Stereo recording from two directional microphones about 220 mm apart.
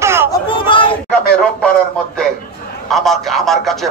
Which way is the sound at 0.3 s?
20° left (ahead or behind).